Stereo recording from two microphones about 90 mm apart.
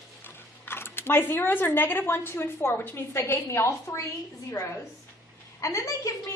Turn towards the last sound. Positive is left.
turn(degrees=35)  # may be behind; listen again after turning